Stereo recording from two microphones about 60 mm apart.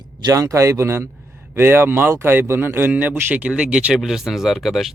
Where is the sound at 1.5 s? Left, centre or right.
Right.